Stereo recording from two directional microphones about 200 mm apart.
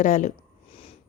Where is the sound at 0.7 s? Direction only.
30° left (ahead or behind).